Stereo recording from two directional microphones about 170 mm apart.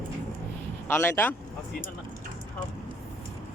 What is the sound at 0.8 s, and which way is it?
Speech, 15° left (ahead or behind).